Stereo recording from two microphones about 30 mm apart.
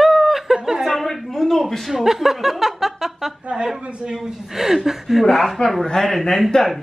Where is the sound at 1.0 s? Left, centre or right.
Centre.